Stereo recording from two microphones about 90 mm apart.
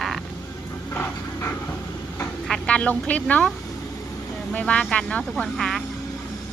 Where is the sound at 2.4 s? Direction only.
10° left (ahead or behind).